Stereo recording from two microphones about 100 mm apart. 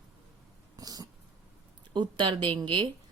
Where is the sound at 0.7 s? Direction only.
40° right (ahead or behind).